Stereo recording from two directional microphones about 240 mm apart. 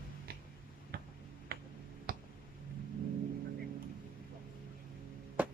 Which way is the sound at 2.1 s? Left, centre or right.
Right.